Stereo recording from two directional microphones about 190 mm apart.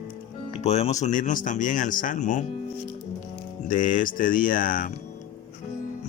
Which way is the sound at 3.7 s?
45° left (ahead or behind).